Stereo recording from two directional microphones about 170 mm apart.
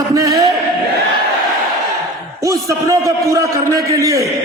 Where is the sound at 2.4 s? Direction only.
20° right (ahead or behind).